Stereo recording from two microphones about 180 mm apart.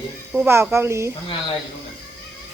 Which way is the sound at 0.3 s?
10° right (ahead or behind).